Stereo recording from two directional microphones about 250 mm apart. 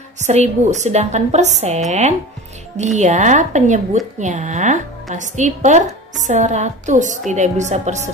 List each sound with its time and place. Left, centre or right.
0.2 s a woman's voice: right